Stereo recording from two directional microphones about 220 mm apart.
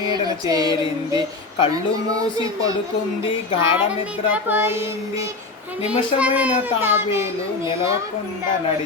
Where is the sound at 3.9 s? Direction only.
5° right (ahead or behind).